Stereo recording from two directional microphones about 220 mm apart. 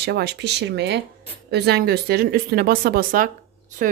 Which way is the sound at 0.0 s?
50° right (ahead or behind).